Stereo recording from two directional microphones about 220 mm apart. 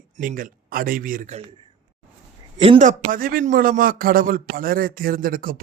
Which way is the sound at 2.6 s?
30° right (ahead or behind).